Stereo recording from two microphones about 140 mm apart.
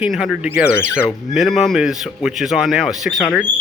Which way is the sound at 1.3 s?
Centre (ahead or behind).